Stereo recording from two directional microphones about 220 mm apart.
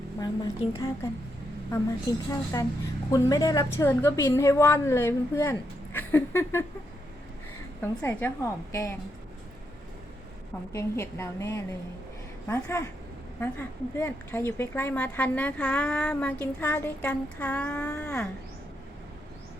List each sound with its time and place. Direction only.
0.2 s a woman's voice: 15° left (ahead or behind)
2.3 s a woman's voice: 15° left (ahead or behind)
7.8 s a woman's voice: 10° left (ahead or behind)
10.7 s a woman's voice: 15° left (ahead or behind)